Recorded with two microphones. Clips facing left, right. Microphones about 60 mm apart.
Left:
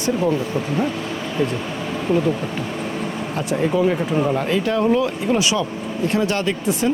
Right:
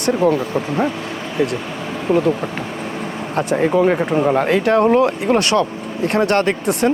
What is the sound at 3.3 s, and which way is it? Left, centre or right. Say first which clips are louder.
Speech: right 5 dB; right.